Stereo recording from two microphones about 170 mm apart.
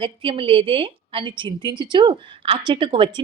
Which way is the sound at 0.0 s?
30° right (ahead or behind).